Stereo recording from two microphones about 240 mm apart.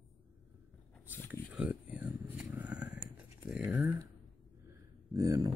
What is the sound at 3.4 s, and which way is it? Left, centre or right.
Speech, centre.